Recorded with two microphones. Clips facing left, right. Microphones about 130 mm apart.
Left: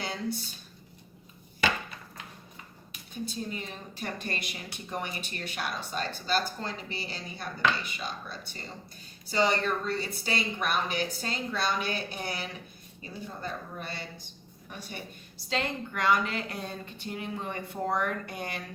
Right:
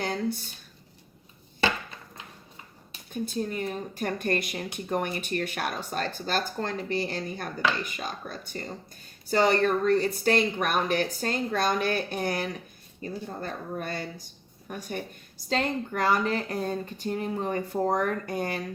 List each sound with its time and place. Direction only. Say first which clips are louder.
0.0 s speech: right 5 dB; 45° right (ahead or behind)
3.1 s speech: right 5 dB; 50° right (ahead or behind)